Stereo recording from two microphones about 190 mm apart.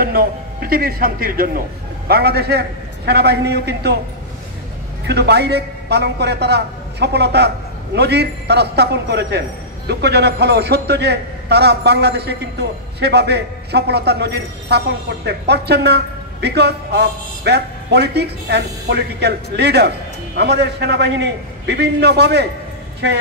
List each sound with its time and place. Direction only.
0.0 s a man's voice: 50° right (ahead or behind)
5.0 s a man's voice: 60° right (ahead or behind)